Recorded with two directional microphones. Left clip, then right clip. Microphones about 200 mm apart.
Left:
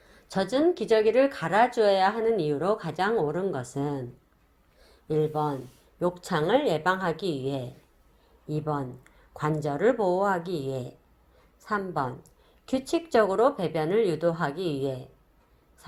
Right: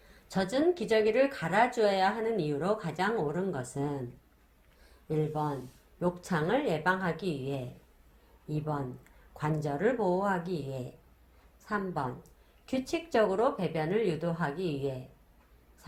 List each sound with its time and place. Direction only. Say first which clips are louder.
0.3 s speech: left 4 dB; 25° left (ahead or behind)
5.0 s speech: left 6 dB; 30° left (ahead or behind)
15.8 s a sound: left 5 dB; 25° left (ahead or behind)